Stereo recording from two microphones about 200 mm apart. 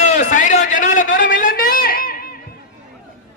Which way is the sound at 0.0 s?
40° left (ahead or behind).